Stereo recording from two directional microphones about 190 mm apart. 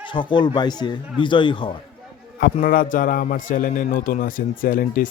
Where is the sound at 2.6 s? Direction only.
45° left (ahead or behind).